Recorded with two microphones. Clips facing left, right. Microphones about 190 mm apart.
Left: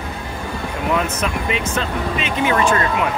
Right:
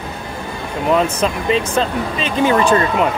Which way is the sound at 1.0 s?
30° right (ahead or behind).